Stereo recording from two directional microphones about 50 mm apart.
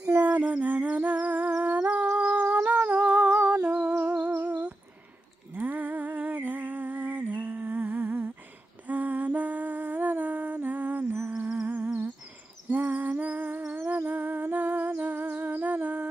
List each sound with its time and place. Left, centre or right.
0.2 s a sound: right
0.7 s humming: right
2.5 s humming: right
4.4 s a sound: right
5.5 s humming: right
10.6 s music: right
11.3 s humming: centre
11.6 s humming: right